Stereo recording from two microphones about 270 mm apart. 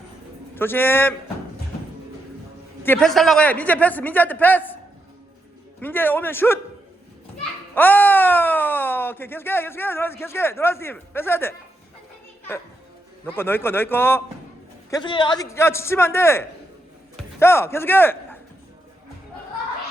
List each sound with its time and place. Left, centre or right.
0.5 s speech: centre
2.8 s speech: centre
5.8 s speech: centre
7.8 s speech: centre
13.2 s speech: centre